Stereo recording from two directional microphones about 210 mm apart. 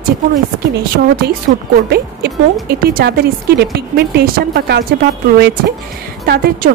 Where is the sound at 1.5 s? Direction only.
50° right (ahead or behind).